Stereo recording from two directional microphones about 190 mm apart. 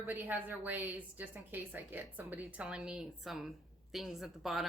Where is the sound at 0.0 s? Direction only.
10° right (ahead or behind).